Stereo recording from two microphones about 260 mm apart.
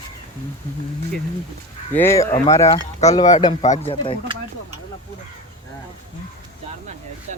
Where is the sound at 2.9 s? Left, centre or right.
Left.